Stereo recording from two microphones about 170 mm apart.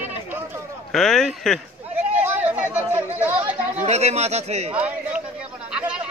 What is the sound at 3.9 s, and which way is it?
Speech, 40° right (ahead or behind).